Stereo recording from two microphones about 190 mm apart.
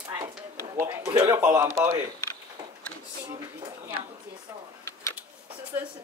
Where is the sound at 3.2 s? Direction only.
25° right (ahead or behind).